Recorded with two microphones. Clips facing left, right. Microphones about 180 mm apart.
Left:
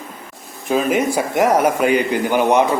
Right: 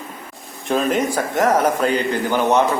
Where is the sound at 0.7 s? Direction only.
5° left (ahead or behind).